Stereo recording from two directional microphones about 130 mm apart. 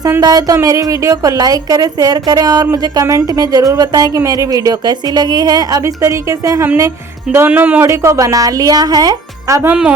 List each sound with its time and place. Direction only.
0.2 s speech: 30° right (ahead or behind)
7.3 s speech: 15° right (ahead or behind); by 9.6 s 30° right (ahead or behind)